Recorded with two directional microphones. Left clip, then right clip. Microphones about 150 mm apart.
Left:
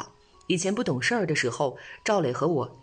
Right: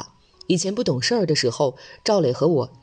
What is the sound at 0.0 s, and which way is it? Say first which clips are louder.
Speech: right 2 dB; 30° right (ahead or behind).